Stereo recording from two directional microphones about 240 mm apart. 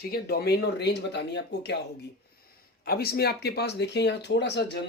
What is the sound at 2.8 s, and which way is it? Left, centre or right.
Speech, left.